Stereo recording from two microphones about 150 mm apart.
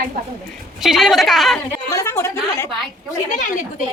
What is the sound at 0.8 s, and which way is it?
Speech, centre (ahead or behind).